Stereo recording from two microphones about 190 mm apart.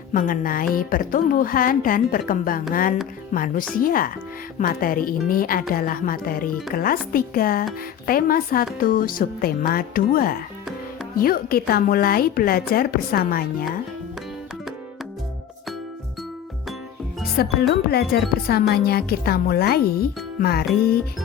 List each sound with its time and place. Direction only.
0.1 s a woman's voice: 45° left (ahead or behind)
17.3 s speech: 55° left (ahead or behind)